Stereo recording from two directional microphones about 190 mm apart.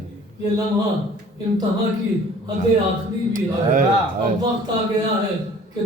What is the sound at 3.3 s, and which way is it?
Speech, 45° right (ahead or behind).